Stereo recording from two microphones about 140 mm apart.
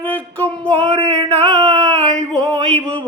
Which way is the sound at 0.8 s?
45° right (ahead or behind).